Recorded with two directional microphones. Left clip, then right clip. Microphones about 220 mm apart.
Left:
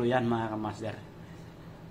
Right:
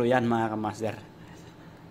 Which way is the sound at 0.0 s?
40° right (ahead or behind).